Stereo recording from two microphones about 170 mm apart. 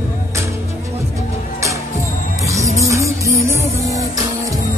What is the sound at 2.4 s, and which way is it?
Music, 20° right (ahead or behind).